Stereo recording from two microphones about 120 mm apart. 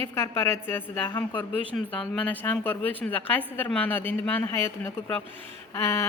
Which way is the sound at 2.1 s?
15° left (ahead or behind).